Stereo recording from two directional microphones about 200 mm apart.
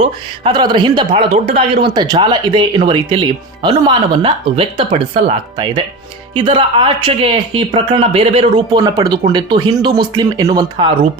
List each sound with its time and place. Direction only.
0.0 s a man's voice: 25° right (ahead or behind)